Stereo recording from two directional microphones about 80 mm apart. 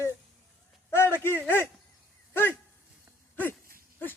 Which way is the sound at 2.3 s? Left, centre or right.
Left.